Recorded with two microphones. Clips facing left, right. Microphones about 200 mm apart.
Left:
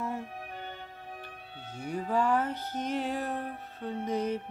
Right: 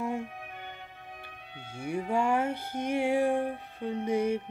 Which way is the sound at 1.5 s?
10° right (ahead or behind).